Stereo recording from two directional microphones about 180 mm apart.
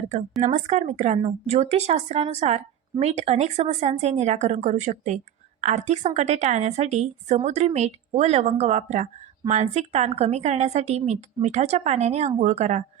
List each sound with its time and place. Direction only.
0.4 s speech: 40° right (ahead or behind)